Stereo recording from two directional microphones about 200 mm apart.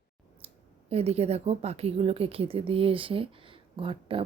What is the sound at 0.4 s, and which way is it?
Speech, 30° right (ahead or behind).